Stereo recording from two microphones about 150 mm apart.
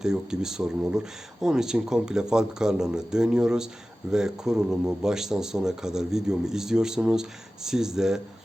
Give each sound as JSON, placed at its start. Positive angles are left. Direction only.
{"t": 0.0, "sound": "speech", "side_deg": -5}